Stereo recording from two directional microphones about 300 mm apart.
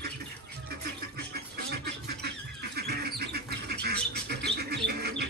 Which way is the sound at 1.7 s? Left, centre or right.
Right.